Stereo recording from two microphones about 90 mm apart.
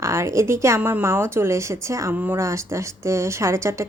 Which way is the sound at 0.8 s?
25° right (ahead or behind).